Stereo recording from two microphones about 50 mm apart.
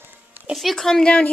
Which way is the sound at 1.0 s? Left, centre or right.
Left.